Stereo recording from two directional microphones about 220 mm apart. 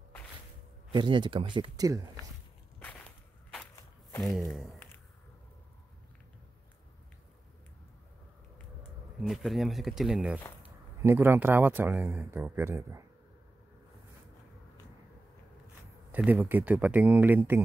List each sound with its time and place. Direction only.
0.9 s speech: 20° right (ahead or behind)
2.8 s whip: 5° left (ahead or behind)
4.4 s speech: centre (ahead or behind)
9.2 s speech: centre (ahead or behind)
16.1 s speech: 10° right (ahead or behind)